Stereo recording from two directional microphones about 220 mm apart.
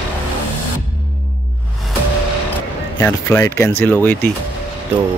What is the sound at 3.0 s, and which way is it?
Speech, 10° left (ahead or behind).